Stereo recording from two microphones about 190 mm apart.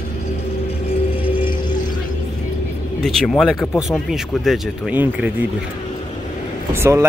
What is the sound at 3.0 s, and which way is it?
Speech, centre (ahead or behind).